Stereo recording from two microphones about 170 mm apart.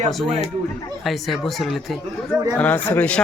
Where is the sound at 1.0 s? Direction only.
Centre (ahead or behind).